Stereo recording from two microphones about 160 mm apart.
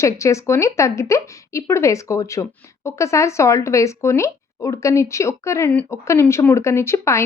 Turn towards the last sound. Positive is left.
turn(degrees=15)  # may be behind; listen again after turning